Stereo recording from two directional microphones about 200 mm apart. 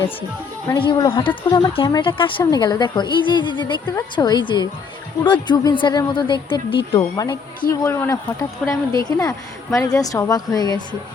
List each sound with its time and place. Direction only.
0.7 s a woman's voice: 20° left (ahead or behind)